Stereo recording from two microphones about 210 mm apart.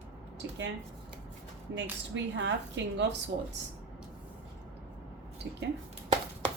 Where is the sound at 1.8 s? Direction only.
60° right (ahead or behind).